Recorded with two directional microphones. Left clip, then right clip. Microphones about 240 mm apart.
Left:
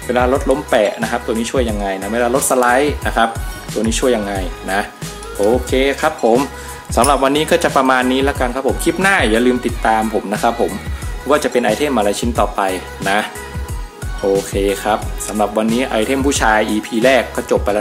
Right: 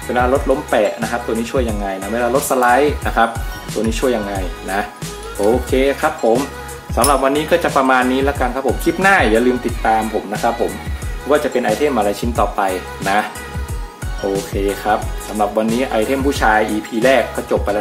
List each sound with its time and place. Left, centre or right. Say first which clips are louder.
0.1 s speech: left 1 dB; left
5.4 s speech: left 1 dB; centre
7.0 s speech: left 1 dB; left
10.4 s music: left 1 dB; left
11.2 s speech: left 1 dB; left
14.5 s speech: left 1 dB; centre